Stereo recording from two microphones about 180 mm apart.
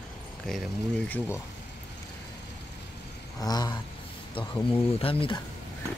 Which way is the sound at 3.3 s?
20° left (ahead or behind).